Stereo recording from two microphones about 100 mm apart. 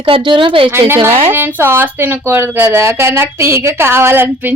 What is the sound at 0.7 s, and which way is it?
Speech, 25° right (ahead or behind).